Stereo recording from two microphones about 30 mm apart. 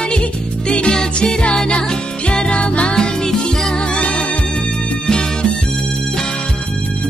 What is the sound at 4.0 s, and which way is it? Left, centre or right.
Music, left.